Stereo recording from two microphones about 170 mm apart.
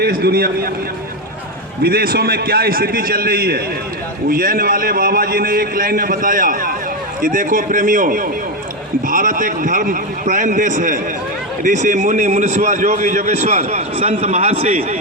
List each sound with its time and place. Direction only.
0.0 s a man's voice: 65° right (ahead or behind)
1.8 s a man's voice: 65° right (ahead or behind); by 14.9 s 40° right (ahead or behind)